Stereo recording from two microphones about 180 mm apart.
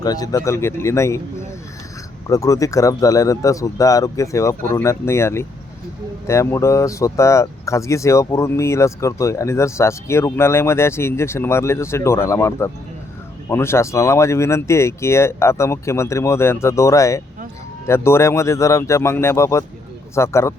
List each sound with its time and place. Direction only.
0.0 s speech: 20° left (ahead or behind)